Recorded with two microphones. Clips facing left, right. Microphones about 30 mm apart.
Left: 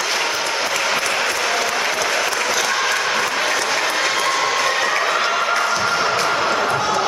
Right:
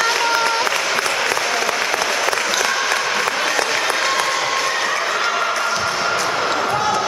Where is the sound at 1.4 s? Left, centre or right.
Centre.